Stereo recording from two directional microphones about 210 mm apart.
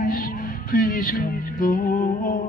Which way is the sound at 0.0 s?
40° left (ahead or behind).